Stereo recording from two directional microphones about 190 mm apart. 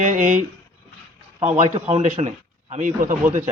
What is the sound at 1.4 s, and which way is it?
Speech, 35° right (ahead or behind).